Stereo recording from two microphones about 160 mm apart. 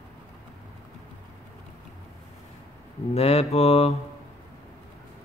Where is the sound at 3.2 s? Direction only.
40° left (ahead or behind).